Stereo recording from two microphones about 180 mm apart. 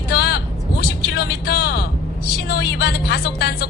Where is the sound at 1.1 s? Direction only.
65° left (ahead or behind).